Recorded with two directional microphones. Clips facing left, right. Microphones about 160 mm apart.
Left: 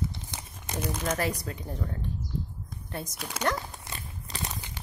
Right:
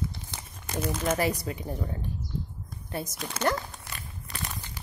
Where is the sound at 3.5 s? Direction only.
20° left (ahead or behind).